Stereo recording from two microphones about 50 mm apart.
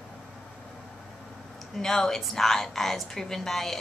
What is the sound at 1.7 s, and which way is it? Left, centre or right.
A woman's voice, centre.